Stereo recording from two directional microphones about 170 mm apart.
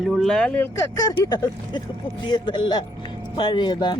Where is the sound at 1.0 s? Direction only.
25° left (ahead or behind).